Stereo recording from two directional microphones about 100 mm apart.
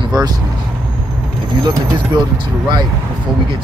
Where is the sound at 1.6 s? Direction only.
50° right (ahead or behind).